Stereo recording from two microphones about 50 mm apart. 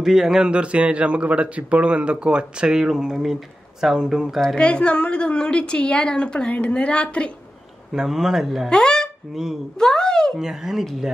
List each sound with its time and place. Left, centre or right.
0.0 s a man's voice: centre
2.8 s speech: centre
4.6 s a woman's voice: left
7.9 s speech: centre
8.6 s a sound: centre
9.3 s speech: centre
9.8 s speech: centre
10.4 s speech: centre